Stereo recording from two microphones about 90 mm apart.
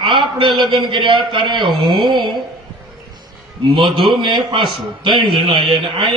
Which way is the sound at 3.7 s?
65° right (ahead or behind).